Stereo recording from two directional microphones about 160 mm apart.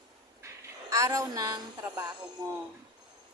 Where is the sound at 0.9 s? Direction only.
20° right (ahead or behind).